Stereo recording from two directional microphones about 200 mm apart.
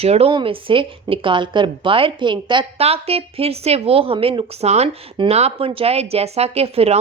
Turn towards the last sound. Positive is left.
turn(degrees=-30)  # may be behind; listen again after turning